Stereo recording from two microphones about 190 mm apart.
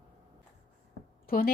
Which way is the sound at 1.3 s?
50° left (ahead or behind).